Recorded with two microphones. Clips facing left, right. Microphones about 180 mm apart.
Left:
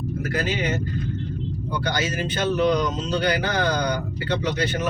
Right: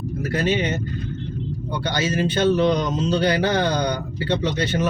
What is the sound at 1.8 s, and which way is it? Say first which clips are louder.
Speech: right 4 dB; 30° right (ahead or behind).